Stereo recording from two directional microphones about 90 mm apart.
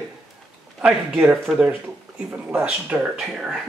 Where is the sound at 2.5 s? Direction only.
25° right (ahead or behind).